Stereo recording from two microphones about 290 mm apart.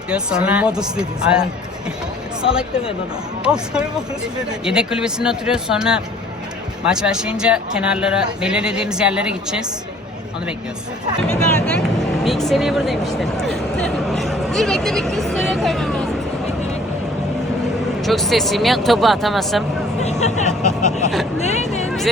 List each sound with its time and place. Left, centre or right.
0.1 s a man's voice: centre
11.2 s a man's voice: centre
18.0 s a man's voice: centre
20.0 s vehicle: left
20.8 s speech: left